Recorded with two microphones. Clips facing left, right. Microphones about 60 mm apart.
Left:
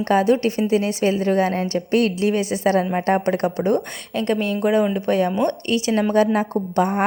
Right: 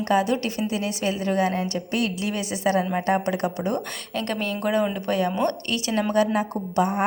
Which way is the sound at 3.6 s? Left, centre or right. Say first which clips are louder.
Left 6 dB; left.